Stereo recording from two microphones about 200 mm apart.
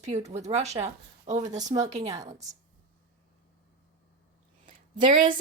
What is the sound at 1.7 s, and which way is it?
Speech, 20° right (ahead or behind).